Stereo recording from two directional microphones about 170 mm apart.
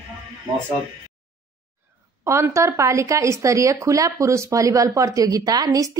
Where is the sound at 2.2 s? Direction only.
15° right (ahead or behind).